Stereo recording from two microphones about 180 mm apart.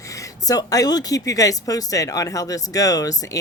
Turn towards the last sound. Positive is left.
turn(degrees=20)  # may be behind; listen again after turning